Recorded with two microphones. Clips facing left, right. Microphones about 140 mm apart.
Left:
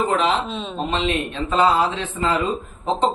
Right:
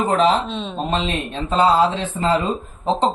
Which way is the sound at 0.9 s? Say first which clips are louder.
Left 1 dB; 35° right (ahead or behind).